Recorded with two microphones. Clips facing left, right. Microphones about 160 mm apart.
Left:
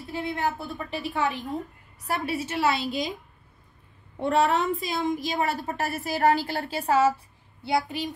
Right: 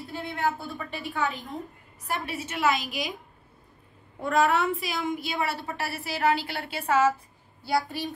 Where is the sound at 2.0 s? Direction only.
35° left (ahead or behind).